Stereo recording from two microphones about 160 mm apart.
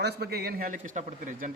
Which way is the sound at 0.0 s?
85° right.